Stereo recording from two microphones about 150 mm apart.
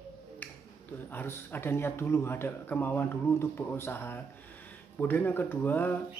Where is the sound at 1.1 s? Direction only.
15° left (ahead or behind).